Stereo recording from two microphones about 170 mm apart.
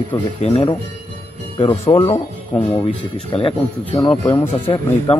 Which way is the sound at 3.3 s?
35° left (ahead or behind).